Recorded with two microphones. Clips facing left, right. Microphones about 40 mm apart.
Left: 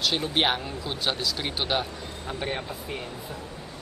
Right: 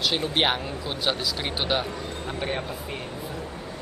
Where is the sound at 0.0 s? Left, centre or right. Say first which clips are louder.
Right 1 dB; centre.